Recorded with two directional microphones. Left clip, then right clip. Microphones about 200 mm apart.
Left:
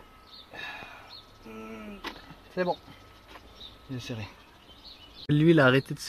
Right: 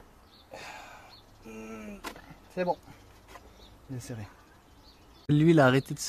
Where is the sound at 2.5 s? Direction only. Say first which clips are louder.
Left 1 dB; 10° left (ahead or behind).